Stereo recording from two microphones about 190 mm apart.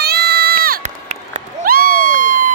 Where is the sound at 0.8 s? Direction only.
35° right (ahead or behind).